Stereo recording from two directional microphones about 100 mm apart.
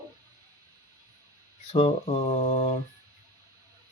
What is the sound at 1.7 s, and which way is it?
Speech, 70° left (ahead or behind).